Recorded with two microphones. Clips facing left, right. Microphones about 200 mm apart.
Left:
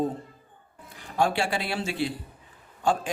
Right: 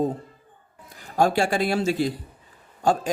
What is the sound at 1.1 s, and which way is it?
A man's voice, 40° right (ahead or behind).